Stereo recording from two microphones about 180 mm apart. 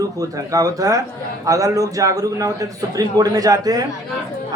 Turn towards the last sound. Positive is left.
turn(degrees=-20)  # may be behind; listen again after turning